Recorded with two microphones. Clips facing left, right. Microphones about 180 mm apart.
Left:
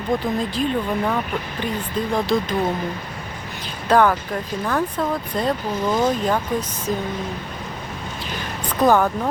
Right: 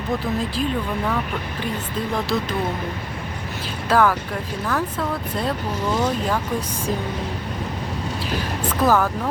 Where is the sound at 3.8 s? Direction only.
5° right (ahead or behind).